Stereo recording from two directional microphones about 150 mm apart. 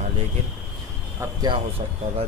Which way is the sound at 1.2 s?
25° right (ahead or behind).